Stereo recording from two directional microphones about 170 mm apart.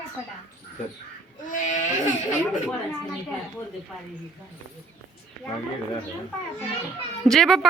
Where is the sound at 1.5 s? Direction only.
50° left (ahead or behind).